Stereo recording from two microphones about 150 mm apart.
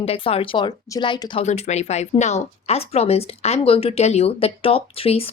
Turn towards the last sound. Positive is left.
turn(degrees=40)  # may be behind; listen again after turning